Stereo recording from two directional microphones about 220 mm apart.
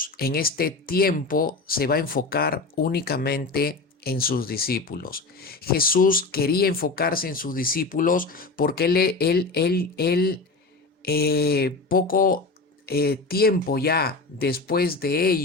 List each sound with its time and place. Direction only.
0.0 s speech: 45° left (ahead or behind)